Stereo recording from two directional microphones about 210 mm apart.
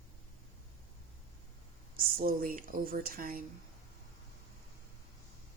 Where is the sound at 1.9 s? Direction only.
45° right (ahead or behind).